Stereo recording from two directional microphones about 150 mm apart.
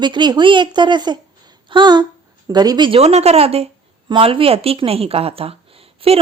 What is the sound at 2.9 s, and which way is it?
A woman's voice, 45° right (ahead or behind).